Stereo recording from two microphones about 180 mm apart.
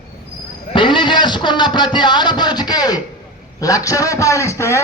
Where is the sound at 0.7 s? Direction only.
25° left (ahead or behind).